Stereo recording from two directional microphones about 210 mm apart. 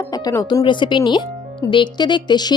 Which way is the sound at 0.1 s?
15° left (ahead or behind).